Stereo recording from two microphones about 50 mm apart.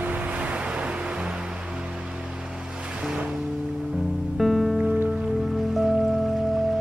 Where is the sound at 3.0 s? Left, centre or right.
Centre.